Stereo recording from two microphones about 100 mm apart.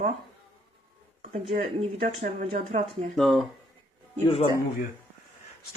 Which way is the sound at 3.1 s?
Centre (ahead or behind).